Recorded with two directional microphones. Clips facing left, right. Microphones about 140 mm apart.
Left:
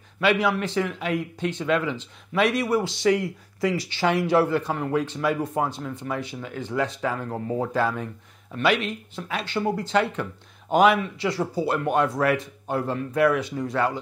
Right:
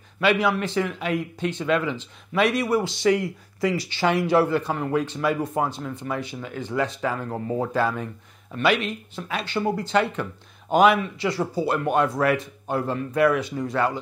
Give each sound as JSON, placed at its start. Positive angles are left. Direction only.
{"t": 0.2, "sound": "a man's voice", "side_deg": -15}